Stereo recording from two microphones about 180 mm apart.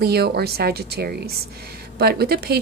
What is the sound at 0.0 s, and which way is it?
Speech, 60° right (ahead or behind).